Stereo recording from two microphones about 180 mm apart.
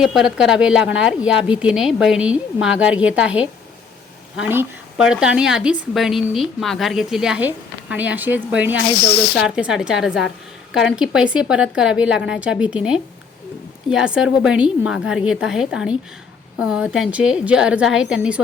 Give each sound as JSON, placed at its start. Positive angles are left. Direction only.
{"t": 0.0, "sound": "a woman's voice", "side_deg": 0}
{"t": 9.0, "sound": "speech", "side_deg": 65}
{"t": 9.6, "sound": "a woman's voice", "side_deg": -5}